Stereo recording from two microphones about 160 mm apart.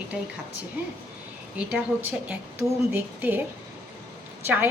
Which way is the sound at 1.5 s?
5° right (ahead or behind).